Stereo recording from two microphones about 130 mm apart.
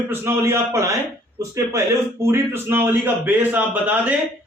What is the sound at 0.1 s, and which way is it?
A man's voice, 20° right (ahead or behind).